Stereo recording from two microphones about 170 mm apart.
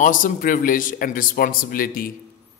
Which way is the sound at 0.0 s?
50° left (ahead or behind).